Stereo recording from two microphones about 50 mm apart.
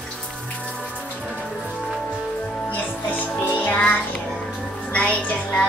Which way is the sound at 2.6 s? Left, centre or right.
Left.